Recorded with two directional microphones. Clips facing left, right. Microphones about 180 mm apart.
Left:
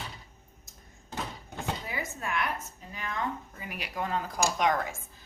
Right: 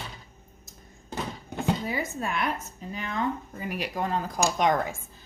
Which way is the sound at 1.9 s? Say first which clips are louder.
Right 4 dB; 30° right (ahead or behind).